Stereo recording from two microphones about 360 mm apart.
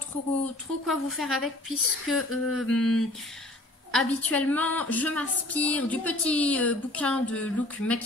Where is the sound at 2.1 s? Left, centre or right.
Left.